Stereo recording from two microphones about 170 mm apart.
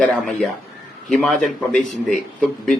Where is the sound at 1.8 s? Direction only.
50° left (ahead or behind).